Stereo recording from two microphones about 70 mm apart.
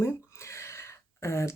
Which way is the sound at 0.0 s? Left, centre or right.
Left.